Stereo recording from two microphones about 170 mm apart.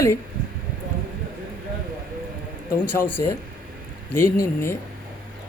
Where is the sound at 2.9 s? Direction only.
10° left (ahead or behind).